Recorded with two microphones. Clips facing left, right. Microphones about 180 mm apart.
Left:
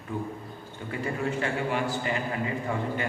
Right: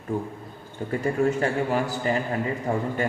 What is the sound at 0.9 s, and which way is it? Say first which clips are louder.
A man's voice: right 7 dB; 40° right (ahead or behind).